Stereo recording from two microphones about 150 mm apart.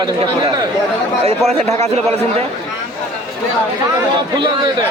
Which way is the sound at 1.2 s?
45° right (ahead or behind).